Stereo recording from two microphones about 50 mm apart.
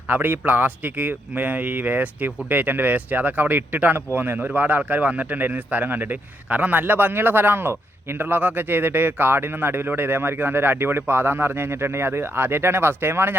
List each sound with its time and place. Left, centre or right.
0.1 s a man's voice: right